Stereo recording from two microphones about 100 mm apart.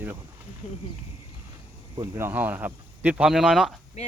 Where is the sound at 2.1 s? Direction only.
25° right (ahead or behind).